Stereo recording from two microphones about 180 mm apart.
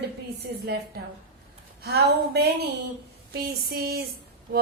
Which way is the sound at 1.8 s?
60° right (ahead or behind).